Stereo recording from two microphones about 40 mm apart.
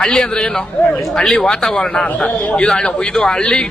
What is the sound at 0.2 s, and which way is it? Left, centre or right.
A man's voice, left.